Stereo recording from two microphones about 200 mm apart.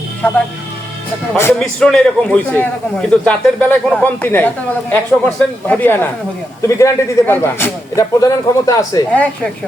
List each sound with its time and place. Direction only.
1.4 s speech: 10° left (ahead or behind)